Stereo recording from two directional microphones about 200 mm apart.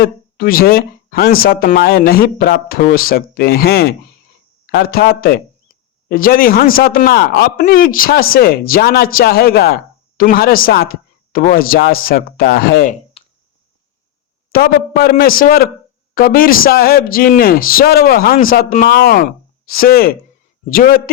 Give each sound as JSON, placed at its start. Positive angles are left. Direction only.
{"t": 0.0, "sound": "speech", "side_deg": 45}
{"t": 5.7, "sound": "a sound", "side_deg": 45}
{"t": 6.1, "sound": "speech", "side_deg": 45}
{"t": 14.5, "sound": "speech", "side_deg": 50}